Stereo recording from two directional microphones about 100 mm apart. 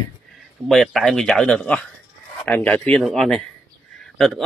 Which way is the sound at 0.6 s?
Centre (ahead or behind).